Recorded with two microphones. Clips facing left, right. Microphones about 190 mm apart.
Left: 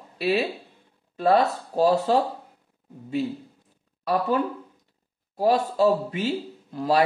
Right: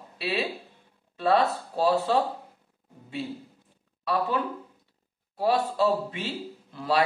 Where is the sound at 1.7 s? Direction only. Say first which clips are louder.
Left 5 dB; 40° left (ahead or behind).